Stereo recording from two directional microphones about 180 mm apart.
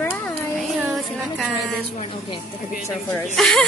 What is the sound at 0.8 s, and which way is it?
Speech, centre (ahead or behind).